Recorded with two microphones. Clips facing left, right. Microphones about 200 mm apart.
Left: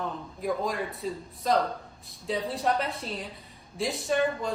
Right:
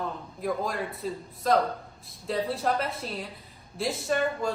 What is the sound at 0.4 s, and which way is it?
Speech, centre (ahead or behind).